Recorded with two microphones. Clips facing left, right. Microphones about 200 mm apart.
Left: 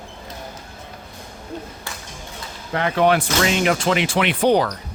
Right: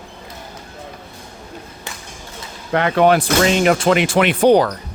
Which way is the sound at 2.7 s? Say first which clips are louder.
Right 4 dB; 65° right (ahead or behind).